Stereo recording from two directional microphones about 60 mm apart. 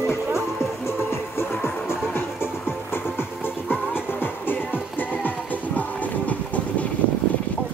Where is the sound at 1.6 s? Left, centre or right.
Left.